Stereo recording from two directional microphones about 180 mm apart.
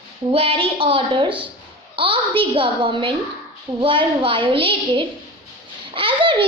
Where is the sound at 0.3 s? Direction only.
30° right (ahead or behind).